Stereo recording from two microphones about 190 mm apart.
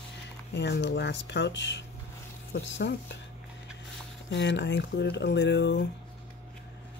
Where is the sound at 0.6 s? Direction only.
65° left (ahead or behind).